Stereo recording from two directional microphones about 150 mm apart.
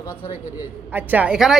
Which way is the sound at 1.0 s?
10° right (ahead or behind).